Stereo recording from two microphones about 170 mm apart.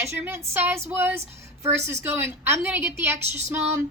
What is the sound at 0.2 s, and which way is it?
A woman's voice, 15° right (ahead or behind).